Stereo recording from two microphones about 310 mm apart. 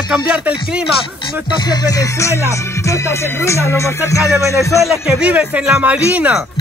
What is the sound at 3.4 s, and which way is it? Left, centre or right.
Music, centre.